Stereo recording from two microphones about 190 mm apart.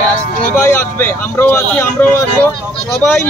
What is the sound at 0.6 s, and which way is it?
Speech, 10° left (ahead or behind).